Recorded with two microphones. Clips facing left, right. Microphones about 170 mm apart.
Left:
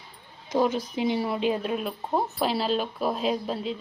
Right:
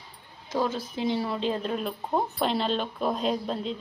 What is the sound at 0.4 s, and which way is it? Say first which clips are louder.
Speech: left 4 dB; 15° left (ahead or behind).